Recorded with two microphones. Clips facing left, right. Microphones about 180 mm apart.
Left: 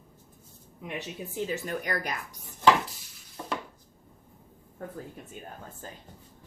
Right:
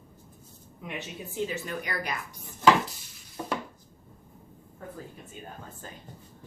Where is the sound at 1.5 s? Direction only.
45° left (ahead or behind).